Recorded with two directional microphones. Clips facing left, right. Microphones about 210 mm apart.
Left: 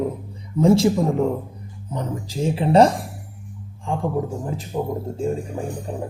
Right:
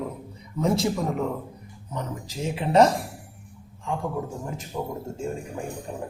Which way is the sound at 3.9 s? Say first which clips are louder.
Left 5 dB; 30° left (ahead or behind).